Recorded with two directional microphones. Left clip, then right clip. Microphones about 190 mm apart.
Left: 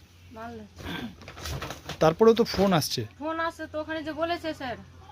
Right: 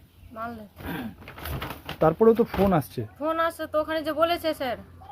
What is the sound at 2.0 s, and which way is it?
Speech, 10° left (ahead or behind).